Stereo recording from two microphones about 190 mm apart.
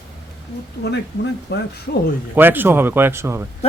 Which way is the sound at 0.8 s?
60° left (ahead or behind).